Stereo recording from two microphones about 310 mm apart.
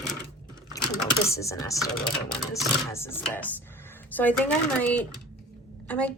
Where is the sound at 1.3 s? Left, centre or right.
Centre.